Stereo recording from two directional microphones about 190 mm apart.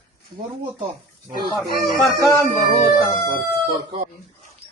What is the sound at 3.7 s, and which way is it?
Speech, 30° right (ahead or behind).